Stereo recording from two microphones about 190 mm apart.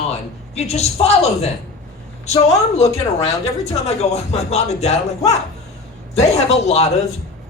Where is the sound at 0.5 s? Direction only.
35° left (ahead or behind).